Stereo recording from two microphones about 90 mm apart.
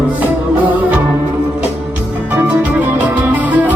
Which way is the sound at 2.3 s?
15° right (ahead or behind).